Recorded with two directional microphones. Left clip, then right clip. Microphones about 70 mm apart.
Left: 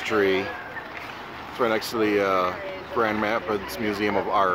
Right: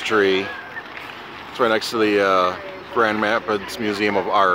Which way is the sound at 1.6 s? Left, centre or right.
Right.